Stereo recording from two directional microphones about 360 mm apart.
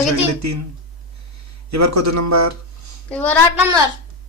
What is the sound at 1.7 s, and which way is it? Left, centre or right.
Speech, right.